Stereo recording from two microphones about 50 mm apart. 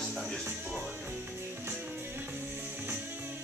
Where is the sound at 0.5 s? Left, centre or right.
Right.